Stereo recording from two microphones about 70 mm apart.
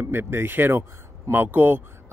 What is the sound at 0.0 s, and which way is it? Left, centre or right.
Speech, right.